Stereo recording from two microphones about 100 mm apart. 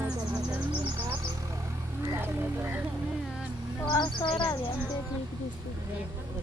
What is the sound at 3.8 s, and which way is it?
Bird, 50° left (ahead or behind).